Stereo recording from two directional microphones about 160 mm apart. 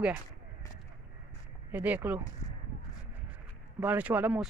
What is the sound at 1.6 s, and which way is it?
Speech, 10° right (ahead or behind).